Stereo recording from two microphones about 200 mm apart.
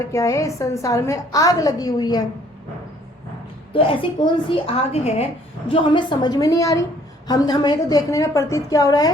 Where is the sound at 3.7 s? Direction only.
25° left (ahead or behind).